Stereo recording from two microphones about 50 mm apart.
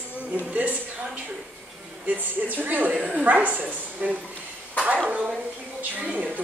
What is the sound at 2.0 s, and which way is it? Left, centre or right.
A woman's voice, right.